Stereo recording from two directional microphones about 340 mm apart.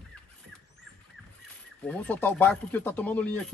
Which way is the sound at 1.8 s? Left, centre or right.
Centre.